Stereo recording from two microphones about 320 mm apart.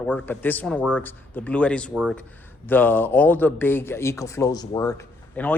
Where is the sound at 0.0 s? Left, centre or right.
Centre.